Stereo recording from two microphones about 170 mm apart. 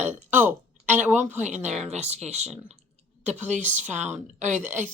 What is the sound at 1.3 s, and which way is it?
A woman's voice, 45° right (ahead or behind).